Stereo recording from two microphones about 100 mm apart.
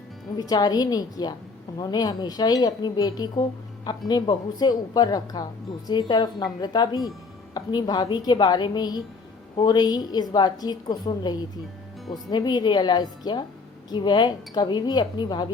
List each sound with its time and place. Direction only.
0.3 s a woman's voice: 40° left (ahead or behind)